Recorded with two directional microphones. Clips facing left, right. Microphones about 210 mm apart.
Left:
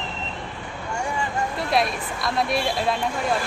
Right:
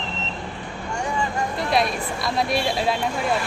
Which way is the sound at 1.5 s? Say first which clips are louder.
Right 1 dB; centre (ahead or behind).